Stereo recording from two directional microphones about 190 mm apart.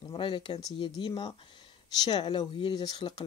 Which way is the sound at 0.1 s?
25° left (ahead or behind).